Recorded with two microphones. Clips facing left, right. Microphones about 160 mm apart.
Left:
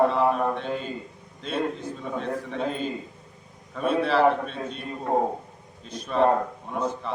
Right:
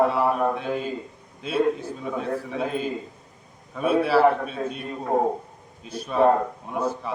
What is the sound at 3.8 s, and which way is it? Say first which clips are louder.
A man's voice: right 2 dB; 5° right (ahead or behind).